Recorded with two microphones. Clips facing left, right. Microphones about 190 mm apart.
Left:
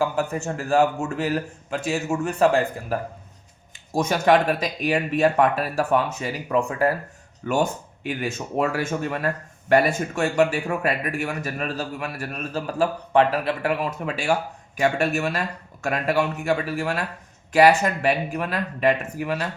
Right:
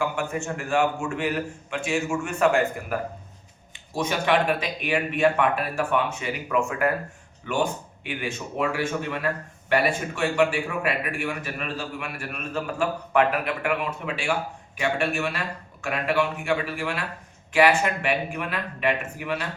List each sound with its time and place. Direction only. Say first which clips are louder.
0.0 s speech: left 3 dB; 35° left (ahead or behind)
3.7 s speech: left 4 dB; 45° left (ahead or behind)